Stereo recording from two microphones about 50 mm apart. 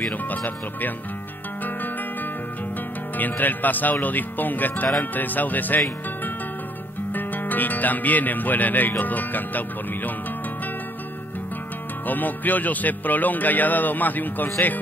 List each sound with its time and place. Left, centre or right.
0.4 s speech: left
3.2 s speech: left
7.2 s speech: left
12.1 s speech: left